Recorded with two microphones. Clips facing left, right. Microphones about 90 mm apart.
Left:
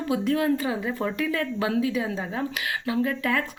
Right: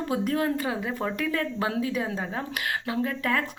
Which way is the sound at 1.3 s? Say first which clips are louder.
Left 2 dB; 35° right (ahead or behind).